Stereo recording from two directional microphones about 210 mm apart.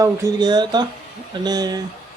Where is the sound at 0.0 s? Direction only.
15° right (ahead or behind).